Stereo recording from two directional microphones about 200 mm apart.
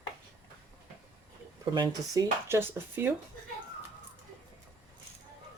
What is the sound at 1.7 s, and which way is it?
Speech, 20° right (ahead or behind).